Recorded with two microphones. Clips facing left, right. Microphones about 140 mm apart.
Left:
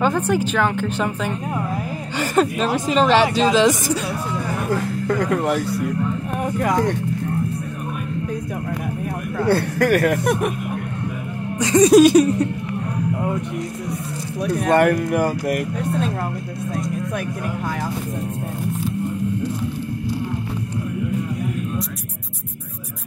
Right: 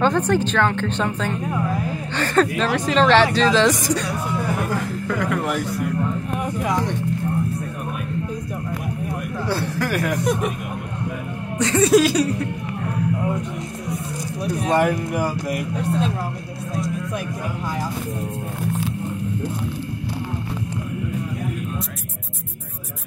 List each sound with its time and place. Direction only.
0.0 s a woman's voice: 5° left (ahead or behind)
5.0 s speech: 40° left (ahead or behind)
6.6 s speech: 50° left (ahead or behind)
9.4 s speech: 55° left (ahead or behind)
11.5 s a woman's voice: 15° left (ahead or behind)
14.4 s speech: 55° left (ahead or behind)